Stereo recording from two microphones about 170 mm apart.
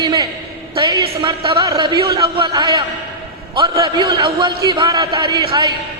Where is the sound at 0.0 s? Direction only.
25° right (ahead or behind).